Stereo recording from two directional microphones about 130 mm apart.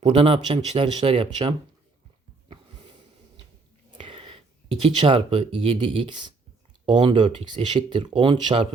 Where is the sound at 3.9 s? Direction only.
40° right (ahead or behind).